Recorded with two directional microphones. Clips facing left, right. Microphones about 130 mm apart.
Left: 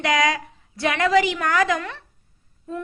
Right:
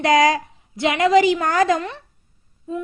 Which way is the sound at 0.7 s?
20° right (ahead or behind).